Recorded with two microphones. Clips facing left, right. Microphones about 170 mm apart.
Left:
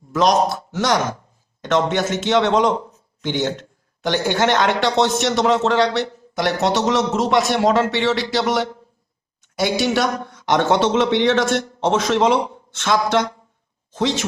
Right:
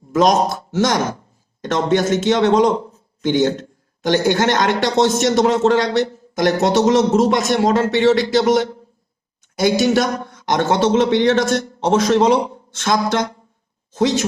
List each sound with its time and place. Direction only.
0.2 s a man's voice: 45° right (ahead or behind)